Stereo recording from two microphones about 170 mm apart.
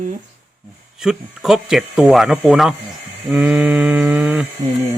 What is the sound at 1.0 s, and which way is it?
Speech, 5° right (ahead or behind).